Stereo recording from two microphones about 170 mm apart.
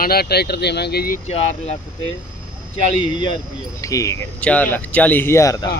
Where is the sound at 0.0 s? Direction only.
65° left (ahead or behind).